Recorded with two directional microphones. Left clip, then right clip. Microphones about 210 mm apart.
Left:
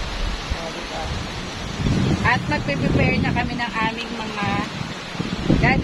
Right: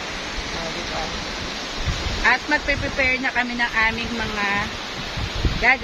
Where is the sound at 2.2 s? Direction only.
Centre (ahead or behind).